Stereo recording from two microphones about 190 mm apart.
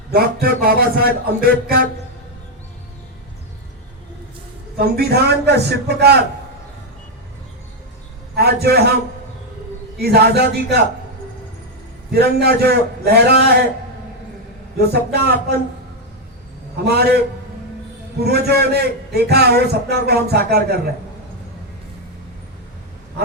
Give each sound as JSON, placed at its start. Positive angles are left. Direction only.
{"t": 0.1, "sound": "a sound", "side_deg": -50}
{"t": 4.8, "sound": "a man's voice", "side_deg": -55}
{"t": 8.4, "sound": "a man's voice", "side_deg": -55}
{"t": 10.0, "sound": "a man's voice", "side_deg": -55}
{"t": 12.1, "sound": "a man's voice", "side_deg": -55}
{"t": 14.8, "sound": "a man's voice", "side_deg": -55}
{"t": 16.7, "sound": "a man's voice", "side_deg": -60}